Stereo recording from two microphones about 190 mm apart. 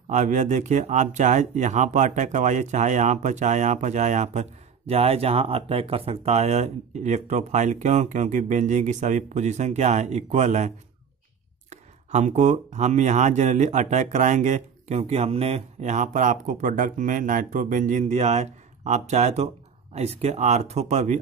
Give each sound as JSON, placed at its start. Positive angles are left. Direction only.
{"t": 0.1, "sound": "speech", "side_deg": -40}
{"t": 11.7, "sound": "speech", "side_deg": -40}